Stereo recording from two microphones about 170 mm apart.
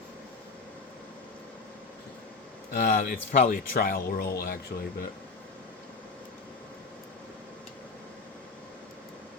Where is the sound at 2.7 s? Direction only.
60° left (ahead or behind).